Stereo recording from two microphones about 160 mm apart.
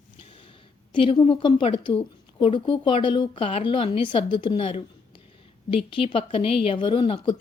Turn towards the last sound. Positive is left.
turn(degrees=30)  # may be behind; listen again after turning